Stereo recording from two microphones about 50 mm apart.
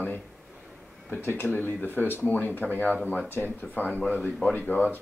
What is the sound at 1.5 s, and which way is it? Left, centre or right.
Speech, left.